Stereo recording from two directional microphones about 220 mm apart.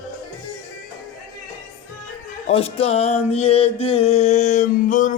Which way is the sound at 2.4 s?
25° left (ahead or behind).